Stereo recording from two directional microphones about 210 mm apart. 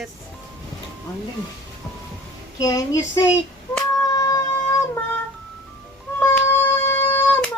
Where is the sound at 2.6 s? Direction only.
20° left (ahead or behind).